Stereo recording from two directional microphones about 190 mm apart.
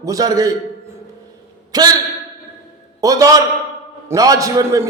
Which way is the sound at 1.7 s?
20° right (ahead or behind).